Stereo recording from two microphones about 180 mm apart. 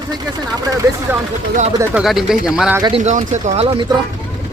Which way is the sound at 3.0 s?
40° right (ahead or behind).